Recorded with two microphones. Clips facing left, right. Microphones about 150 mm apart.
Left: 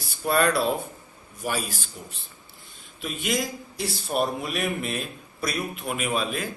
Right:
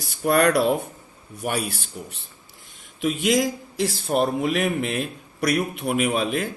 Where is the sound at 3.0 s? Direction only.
85° right.